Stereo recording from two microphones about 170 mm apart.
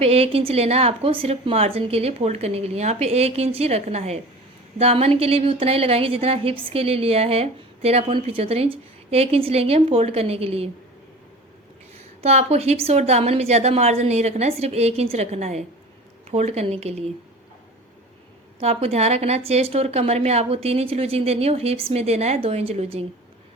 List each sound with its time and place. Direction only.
0.0 s a woman's voice: 35° right (ahead or behind)
12.2 s a woman's voice: 40° right (ahead or behind)
18.6 s a woman's voice: 40° right (ahead or behind)